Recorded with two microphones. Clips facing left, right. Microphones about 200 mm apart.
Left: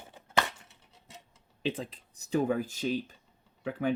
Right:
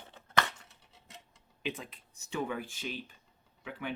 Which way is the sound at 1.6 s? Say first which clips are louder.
Left 6 dB; 30° left (ahead or behind).